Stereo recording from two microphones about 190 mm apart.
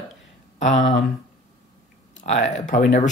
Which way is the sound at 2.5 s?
40° left (ahead or behind).